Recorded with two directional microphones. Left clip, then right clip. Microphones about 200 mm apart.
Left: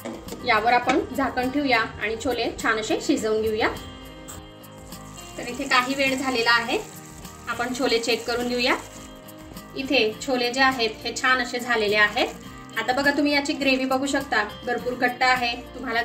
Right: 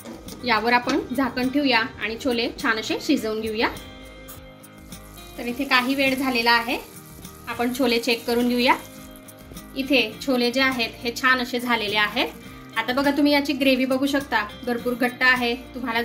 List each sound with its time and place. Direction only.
0.4 s a woman's voice: 40° right (ahead or behind)
5.4 s a woman's voice: 45° right (ahead or behind)
9.8 s a woman's voice: 45° right (ahead or behind)